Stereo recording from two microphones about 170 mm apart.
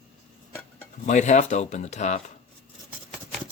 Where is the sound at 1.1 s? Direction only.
45° left (ahead or behind).